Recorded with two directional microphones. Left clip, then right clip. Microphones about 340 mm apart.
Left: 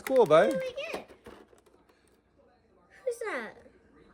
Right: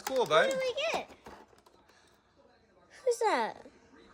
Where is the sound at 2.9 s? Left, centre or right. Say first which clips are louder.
Right 5 dB; centre.